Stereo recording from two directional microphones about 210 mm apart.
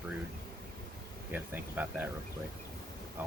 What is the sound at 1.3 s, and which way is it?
Speech, 10° right (ahead or behind).